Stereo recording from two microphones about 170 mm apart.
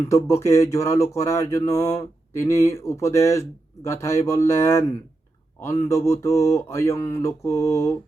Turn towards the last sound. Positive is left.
turn(degrees=15)  # may be behind; listen again after turning